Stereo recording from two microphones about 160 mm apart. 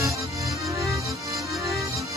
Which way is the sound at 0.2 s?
20° right (ahead or behind).